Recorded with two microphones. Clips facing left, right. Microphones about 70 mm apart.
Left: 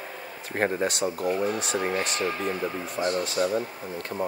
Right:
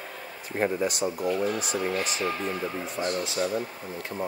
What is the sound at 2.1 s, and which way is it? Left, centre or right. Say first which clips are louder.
Speech: left 1 dB; centre.